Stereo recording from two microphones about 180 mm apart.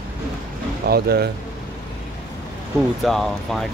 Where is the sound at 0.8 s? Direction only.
60° right (ahead or behind).